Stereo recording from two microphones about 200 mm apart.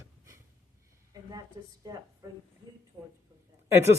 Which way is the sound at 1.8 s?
20° right (ahead or behind).